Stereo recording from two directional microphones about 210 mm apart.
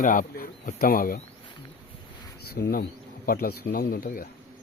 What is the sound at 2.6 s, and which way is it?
Speech, 45° left (ahead or behind).